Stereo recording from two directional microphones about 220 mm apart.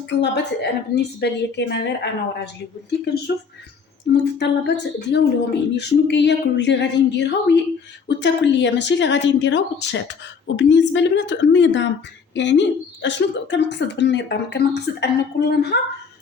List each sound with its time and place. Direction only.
0.1 s speech: 50° left (ahead or behind)
4.1 s speech: 50° left (ahead or behind)